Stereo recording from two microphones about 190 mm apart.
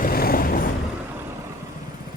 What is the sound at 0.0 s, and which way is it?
Vehicle, 50° left (ahead or behind).